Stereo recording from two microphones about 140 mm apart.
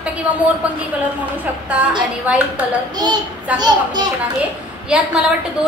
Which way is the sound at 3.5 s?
30° right (ahead or behind).